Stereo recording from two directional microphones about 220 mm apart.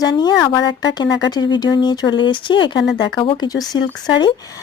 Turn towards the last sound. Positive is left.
turn(degrees=20)  # may be behind; listen again after turning